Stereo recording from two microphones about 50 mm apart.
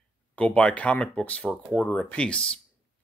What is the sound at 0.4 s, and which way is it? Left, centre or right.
Speech, left.